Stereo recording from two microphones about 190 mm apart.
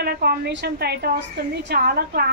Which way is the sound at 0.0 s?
55° right (ahead or behind).